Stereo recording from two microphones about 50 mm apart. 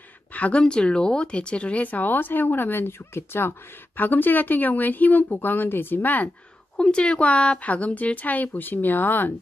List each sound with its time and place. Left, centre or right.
0.3 s a woman's voice: left
3.9 s a woman's voice: left
6.8 s a woman's voice: centre; by 9.3 s left